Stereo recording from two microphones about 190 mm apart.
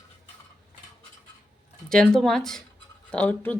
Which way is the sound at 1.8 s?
5° left (ahead or behind).